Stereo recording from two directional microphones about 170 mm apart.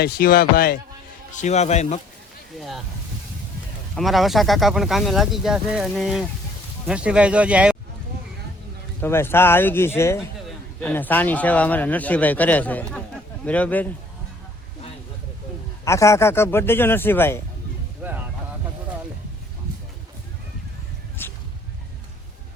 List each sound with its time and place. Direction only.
0.0 s speech: 65° left (ahead or behind)
1.4 s speech: 40° left (ahead or behind)
2.6 s speech: centre (ahead or behind)
3.9 s speech: centre (ahead or behind)
9.0 s a man's voice: 15° left (ahead or behind)
15.8 s a man's voice: 15° left (ahead or behind)
21.2 s a sound: 15° left (ahead or behind)